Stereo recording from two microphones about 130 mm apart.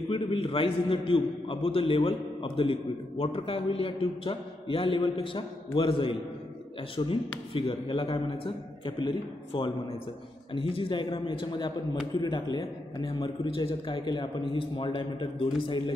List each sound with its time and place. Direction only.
0.1 s a man's voice: 45° left (ahead or behind)